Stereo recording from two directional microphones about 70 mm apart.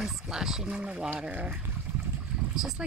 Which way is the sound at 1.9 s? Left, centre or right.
Right.